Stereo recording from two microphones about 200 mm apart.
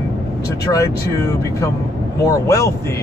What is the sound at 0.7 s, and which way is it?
Speech, 15° left (ahead or behind).